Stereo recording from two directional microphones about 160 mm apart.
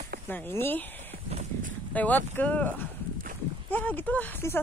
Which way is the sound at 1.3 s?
45° right (ahead or behind).